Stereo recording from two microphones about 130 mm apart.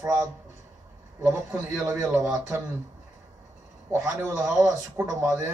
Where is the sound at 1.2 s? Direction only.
25° right (ahead or behind).